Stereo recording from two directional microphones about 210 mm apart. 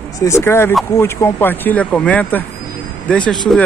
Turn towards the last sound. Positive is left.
turn(degrees=5)  # may be behind; listen again after turning